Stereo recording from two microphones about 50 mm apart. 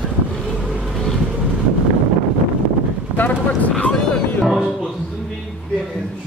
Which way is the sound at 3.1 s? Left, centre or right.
Left.